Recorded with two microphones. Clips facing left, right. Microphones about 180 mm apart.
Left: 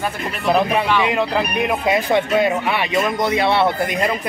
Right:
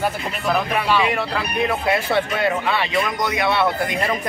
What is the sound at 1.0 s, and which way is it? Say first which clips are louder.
Speech: left 4 dB; 20° left (ahead or behind).